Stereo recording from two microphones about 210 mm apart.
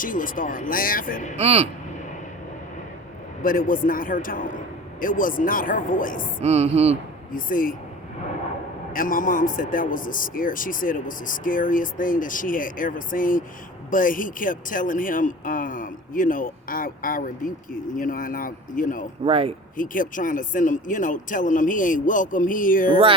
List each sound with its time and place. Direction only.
0.0 s speech: 40° left (ahead or behind)
1.4 s speech: 30° right (ahead or behind)
3.4 s speech: 40° left (ahead or behind)
6.4 s speech: 30° right (ahead or behind)
7.3 s speech: 40° left (ahead or behind)
8.9 s speech: 40° left (ahead or behind)
19.2 s speech: 25° right (ahead or behind)
19.7 s speech: 40° left (ahead or behind)